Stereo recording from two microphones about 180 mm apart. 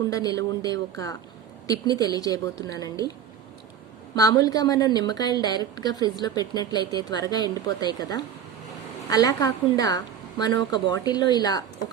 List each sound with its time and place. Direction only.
0.1 s a woman's voice: 20° left (ahead or behind)